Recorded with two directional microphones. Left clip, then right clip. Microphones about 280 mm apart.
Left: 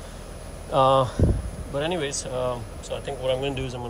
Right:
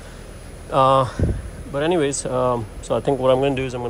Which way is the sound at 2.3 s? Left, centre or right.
Centre.